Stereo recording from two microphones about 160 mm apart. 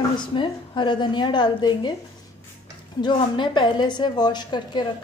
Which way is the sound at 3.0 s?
30° left (ahead or behind).